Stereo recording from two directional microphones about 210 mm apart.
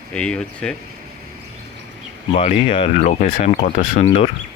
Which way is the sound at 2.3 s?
30° left (ahead or behind).